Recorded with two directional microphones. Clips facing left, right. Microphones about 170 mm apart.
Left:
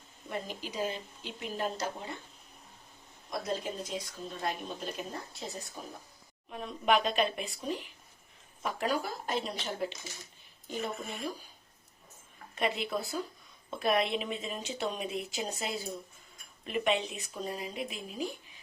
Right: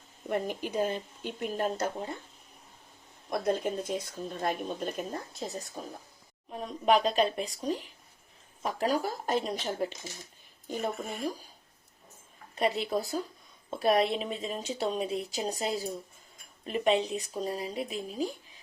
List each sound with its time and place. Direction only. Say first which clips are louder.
0.3 s speech: right 7 dB; 55° right (ahead or behind)
3.2 s speech: right 6 dB; 55° right (ahead or behind)
6.5 s speech: right 3 dB; 35° right (ahead or behind)
12.5 s speech: right 4 dB; 35° right (ahead or behind)